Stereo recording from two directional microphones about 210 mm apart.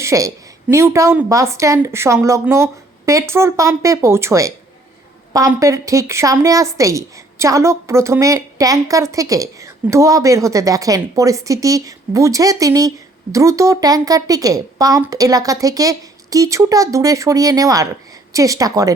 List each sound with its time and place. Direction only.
0.0 s a woman's voice: 15° right (ahead or behind)